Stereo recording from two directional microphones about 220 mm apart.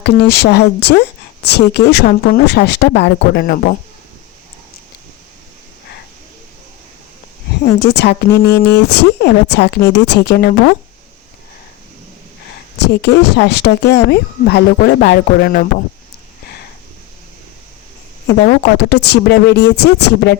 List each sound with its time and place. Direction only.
0.0 s speech: 50° left (ahead or behind)
7.6 s speech: 50° left (ahead or behind)
12.8 s speech: 50° left (ahead or behind)
18.3 s speech: 50° left (ahead or behind)